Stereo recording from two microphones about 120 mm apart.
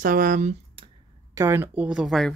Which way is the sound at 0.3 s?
80° right.